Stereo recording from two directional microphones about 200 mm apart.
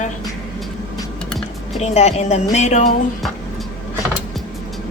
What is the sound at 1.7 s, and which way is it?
Speech, 35° left (ahead or behind).